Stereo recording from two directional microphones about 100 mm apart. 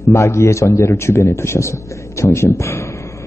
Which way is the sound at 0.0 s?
30° left (ahead or behind).